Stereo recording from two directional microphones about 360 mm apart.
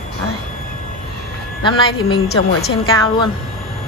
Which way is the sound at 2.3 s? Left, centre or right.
Left.